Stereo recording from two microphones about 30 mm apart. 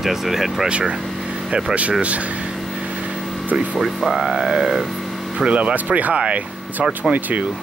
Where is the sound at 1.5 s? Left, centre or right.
Right.